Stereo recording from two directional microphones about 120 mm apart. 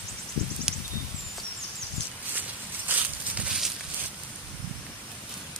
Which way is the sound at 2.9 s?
15° right (ahead or behind).